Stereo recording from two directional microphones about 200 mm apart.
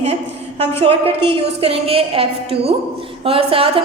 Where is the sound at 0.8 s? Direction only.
30° right (ahead or behind).